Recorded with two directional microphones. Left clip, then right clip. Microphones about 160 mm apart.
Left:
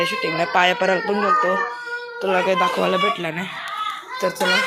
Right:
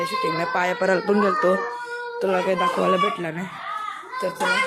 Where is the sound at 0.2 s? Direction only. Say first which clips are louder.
Left 3 dB; 10° right (ahead or behind).